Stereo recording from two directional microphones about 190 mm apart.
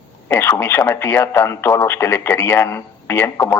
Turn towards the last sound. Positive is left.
turn(degrees=15)  # may be behind; listen again after turning